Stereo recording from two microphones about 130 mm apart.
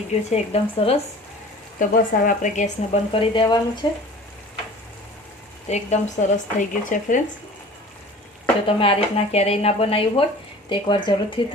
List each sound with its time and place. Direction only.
0.1 s speech: 60° left (ahead or behind)
1.8 s speech: 90° left
2.9 s speech: 45° left (ahead or behind)
5.6 s speech: 60° left (ahead or behind); by 7.2 s 75° left (ahead or behind)
8.6 s speech: 45° left (ahead or behind)
10.7 s speech: 35° left (ahead or behind)